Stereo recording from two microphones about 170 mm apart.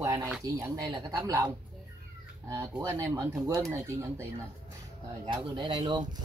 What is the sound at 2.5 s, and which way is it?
Speech, 15° right (ahead or behind).